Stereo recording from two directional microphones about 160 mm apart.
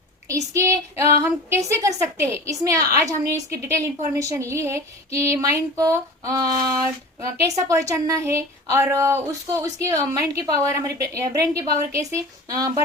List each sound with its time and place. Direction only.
0.3 s a woman's voice: 20° right (ahead or behind)